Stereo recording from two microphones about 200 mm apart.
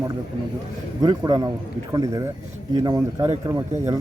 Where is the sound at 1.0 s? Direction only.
20° right (ahead or behind).